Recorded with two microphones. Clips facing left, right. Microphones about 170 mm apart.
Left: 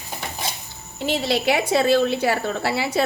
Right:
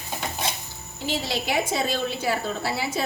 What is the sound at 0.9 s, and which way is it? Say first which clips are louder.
A woman's voice: left 6 dB; 65° left (ahead or behind).